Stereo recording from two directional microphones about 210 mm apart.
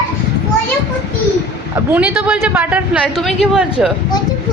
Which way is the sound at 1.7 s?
10° right (ahead or behind).